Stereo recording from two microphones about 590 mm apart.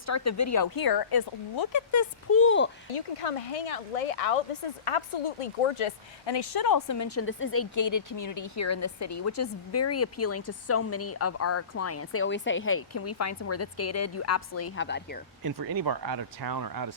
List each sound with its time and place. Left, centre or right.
0.0 s speech: left
2.9 s speech: left
4.9 s speech: left; by 15.2 s centre
15.4 s speech: right